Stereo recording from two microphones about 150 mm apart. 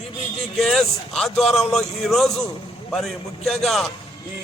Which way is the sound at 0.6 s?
Centre (ahead or behind).